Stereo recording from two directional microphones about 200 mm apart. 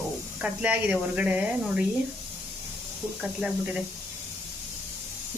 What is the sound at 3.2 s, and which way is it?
Speech, 5° right (ahead or behind).